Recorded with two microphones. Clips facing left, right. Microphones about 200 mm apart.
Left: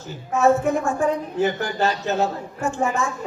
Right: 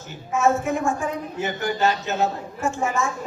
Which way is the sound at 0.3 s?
35° left (ahead or behind).